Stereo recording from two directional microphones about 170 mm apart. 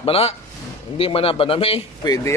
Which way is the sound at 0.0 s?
35° left (ahead or behind).